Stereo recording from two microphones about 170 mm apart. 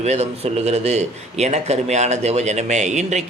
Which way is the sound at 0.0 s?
40° right (ahead or behind).